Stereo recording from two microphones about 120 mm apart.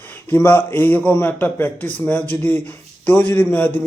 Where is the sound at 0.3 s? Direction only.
15° left (ahead or behind).